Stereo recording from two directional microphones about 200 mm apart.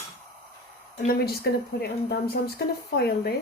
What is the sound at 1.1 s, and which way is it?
Speech, 50° left (ahead or behind).